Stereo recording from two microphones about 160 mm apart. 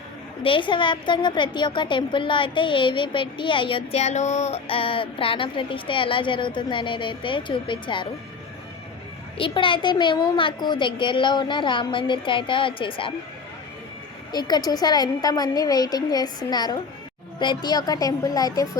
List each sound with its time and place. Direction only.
0.4 s a woman's voice: 30° left (ahead or behind)
9.4 s a woman's voice: 30° left (ahead or behind)
14.3 s a woman's voice: 25° left (ahead or behind)